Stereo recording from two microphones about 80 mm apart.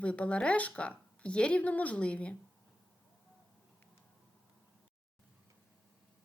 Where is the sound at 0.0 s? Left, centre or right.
Centre.